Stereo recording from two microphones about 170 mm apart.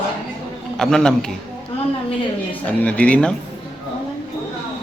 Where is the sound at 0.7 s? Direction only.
5° left (ahead or behind).